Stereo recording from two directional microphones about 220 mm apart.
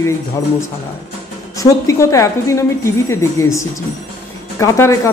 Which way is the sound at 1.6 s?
15° left (ahead or behind).